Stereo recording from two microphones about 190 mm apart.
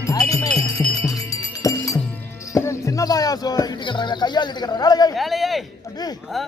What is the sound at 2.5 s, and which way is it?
Speech, 15° left (ahead or behind).